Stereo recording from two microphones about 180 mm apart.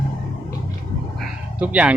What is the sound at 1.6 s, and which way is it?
Speech, 5° right (ahead or behind).